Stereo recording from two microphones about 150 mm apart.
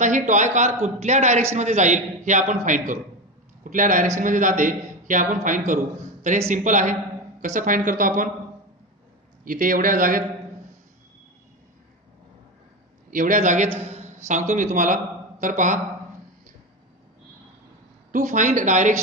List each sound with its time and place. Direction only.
0.0 s a man's voice: 55° right (ahead or behind)
9.4 s speech: 65° right (ahead or behind)
13.1 s a man's voice: 65° right (ahead or behind)
13.7 s a sound: 45° right (ahead or behind)
14.5 s a man's voice: 60° right (ahead or behind)
18.1 s a man's voice: 55° right (ahead or behind)